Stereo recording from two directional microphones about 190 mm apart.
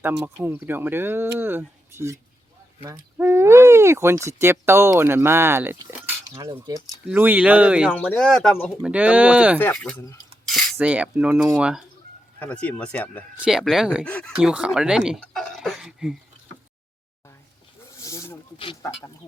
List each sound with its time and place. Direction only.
0.4 s speech: 10° right (ahead or behind); by 8.8 s 5° left (ahead or behind)
8.8 s speech: 5° right (ahead or behind)
9.6 s speech: 10° left (ahead or behind)
10.5 s cutlery: 10° right (ahead or behind)
12.4 s speech: 5° left (ahead or behind)
13.3 s speech: 5° right (ahead or behind)
14.3 s speech: 5° right (ahead or behind)
17.9 s snake: 15° left (ahead or behind)
18.5 s speech: 30° left (ahead or behind)